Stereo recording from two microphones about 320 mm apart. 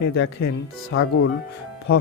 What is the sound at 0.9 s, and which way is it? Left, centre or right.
Speech, left.